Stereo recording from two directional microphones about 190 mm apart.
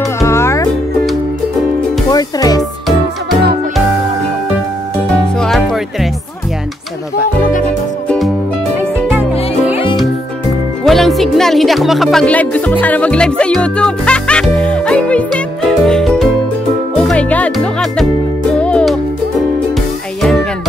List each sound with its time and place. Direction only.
0.2 s music: 15° left (ahead or behind)
2.0 s music: 20° left (ahead or behind)
5.4 s music: centre (ahead or behind)
10.8 s music: centre (ahead or behind)
20.2 s music: centre (ahead or behind)